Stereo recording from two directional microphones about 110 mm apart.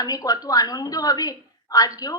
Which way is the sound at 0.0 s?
35° left (ahead or behind).